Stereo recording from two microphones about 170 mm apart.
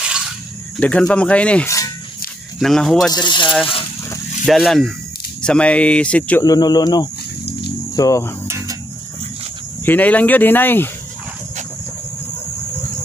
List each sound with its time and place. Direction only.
0.7 s speech: 10° left (ahead or behind)
3.1 s speech: 25° left (ahead or behind)
4.5 s speech: centre (ahead or behind)
6.4 s speech: 25° left (ahead or behind)
8.5 s a sound: 15° right (ahead or behind)
9.8 s speech: 10° left (ahead or behind)